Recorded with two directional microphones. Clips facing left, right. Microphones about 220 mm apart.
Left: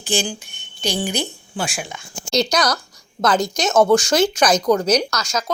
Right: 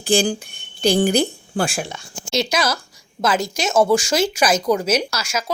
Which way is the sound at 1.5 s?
45° right (ahead or behind).